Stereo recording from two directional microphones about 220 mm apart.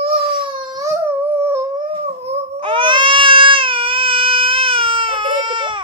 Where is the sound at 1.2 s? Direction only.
10° right (ahead or behind).